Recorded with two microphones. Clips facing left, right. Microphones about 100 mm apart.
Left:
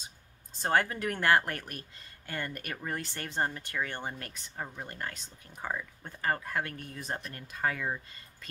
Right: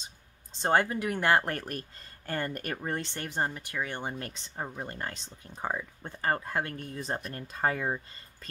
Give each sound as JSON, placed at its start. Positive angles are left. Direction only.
{"t": 0.5, "sound": "speech", "side_deg": -25}
{"t": 1.5, "sound": "speech", "side_deg": -35}